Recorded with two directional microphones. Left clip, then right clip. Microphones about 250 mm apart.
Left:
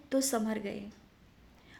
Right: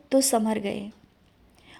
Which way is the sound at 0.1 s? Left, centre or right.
Right.